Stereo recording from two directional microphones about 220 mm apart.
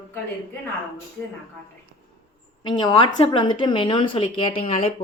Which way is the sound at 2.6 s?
20° left (ahead or behind).